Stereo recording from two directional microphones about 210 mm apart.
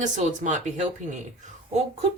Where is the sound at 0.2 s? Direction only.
35° right (ahead or behind).